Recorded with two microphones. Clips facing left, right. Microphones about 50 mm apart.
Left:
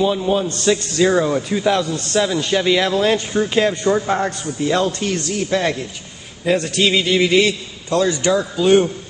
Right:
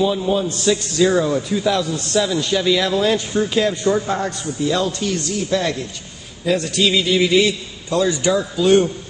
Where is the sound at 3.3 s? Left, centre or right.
Centre.